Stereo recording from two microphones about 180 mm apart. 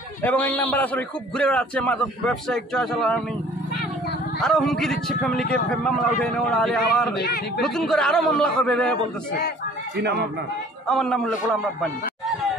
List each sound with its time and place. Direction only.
0.2 s a man's voice: 10° left (ahead or behind)
4.4 s speech: centre (ahead or behind)
7.2 s speech: 60° left (ahead or behind)
7.6 s speech: centre (ahead or behind)
10.9 s a man's voice: centre (ahead or behind)